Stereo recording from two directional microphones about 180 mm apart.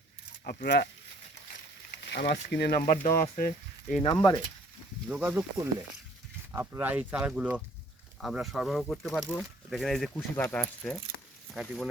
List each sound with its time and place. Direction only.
0.4 s speech: 60° left (ahead or behind)
2.0 s speech: 65° left (ahead or behind); by 4.0 s 50° left (ahead or behind)
4.0 s speech: 20° left (ahead or behind)
5.0 s speech: 5° right (ahead or behind)
6.5 s speech: 15° right (ahead or behind)